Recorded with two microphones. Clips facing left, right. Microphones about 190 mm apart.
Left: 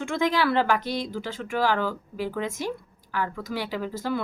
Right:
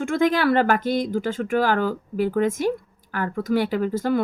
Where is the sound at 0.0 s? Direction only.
45° right (ahead or behind).